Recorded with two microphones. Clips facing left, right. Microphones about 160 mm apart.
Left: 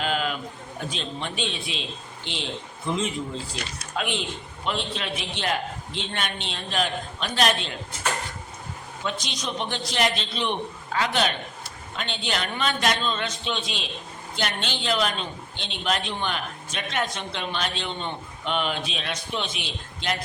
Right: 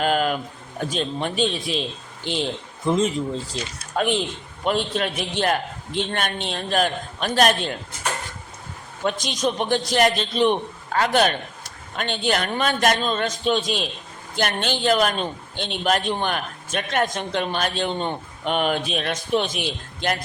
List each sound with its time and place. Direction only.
0.0 s a sound: 50° right (ahead or behind)
0.9 s a man's voice: 45° right (ahead or behind)
9.0 s a man's voice: 50° right (ahead or behind)